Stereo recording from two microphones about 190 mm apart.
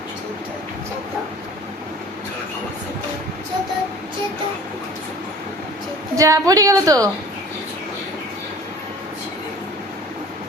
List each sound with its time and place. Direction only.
6.1 s a woman's voice: 15° right (ahead or behind)